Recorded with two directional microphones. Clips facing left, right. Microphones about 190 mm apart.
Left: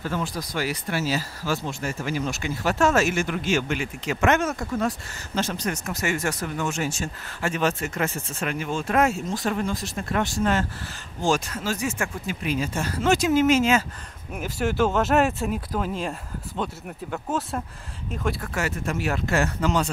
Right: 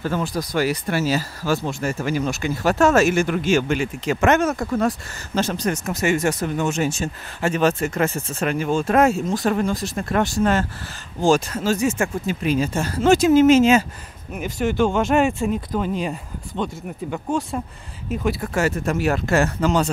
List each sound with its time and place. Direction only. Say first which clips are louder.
0.1 s speech: right 5 dB; 40° right (ahead or behind)
3.0 s speech: right 6 dB; 40° right (ahead or behind)
4.5 s speech: right 5 dB; 50° right (ahead or behind); by 7.5 s 20° right (ahead or behind)
7.5 s speech: right 6 dB; 40° right (ahead or behind)
11.2 s speech: right 6 dB; 30° right (ahead or behind)
14.3 s speech: right 3 dB; 5° left (ahead or behind)
18.5 s speech: right 6 dB; 40° right (ahead or behind)